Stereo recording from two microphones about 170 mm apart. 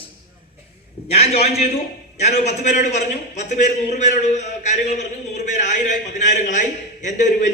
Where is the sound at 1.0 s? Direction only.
35° left (ahead or behind).